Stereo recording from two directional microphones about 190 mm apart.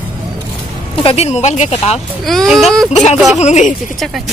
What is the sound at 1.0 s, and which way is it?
Speech, 35° left (ahead or behind).